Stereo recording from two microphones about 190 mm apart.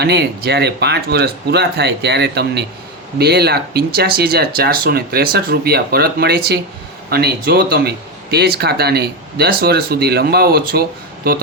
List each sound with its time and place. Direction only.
0.0 s speech: 60° right (ahead or behind)